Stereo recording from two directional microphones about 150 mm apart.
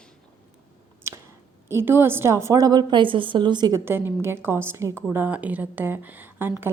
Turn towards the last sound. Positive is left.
turn(degrees=-15)  # may be behind; listen again after turning